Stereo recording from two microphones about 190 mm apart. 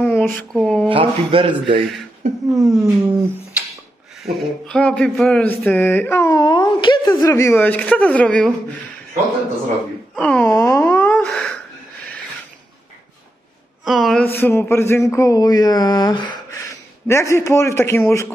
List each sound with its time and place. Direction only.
0.0 s a sound: 10° left (ahead or behind)
0.3 s speech: centre (ahead or behind)
0.8 s speech: 30° right (ahead or behind)
2.5 s speech: centre (ahead or behind)
10.1 s wail: 5° left (ahead or behind)
13.8 s speech: centre (ahead or behind)